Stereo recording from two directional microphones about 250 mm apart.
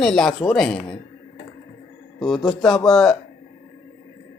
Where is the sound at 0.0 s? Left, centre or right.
Centre.